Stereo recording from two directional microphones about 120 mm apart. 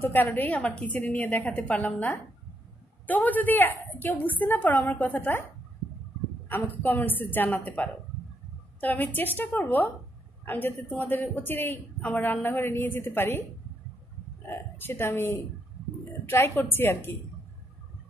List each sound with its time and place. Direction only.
0.0 s a woman's voice: 15° left (ahead or behind)
6.5 s a woman's voice: 15° left (ahead or behind)
14.5 s a woman's voice: 20° left (ahead or behind)